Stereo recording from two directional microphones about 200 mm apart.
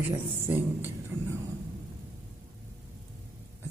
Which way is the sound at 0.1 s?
10° right (ahead or behind).